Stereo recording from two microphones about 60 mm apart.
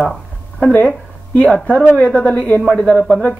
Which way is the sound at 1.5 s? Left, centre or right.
Centre.